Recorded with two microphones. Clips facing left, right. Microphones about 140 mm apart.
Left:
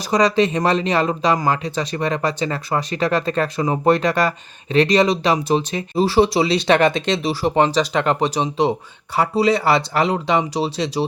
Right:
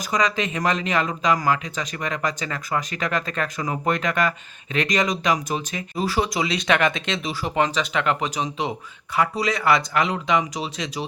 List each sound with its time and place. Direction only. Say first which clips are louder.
0.1 s speech: left 7 dB; 35° left (ahead or behind)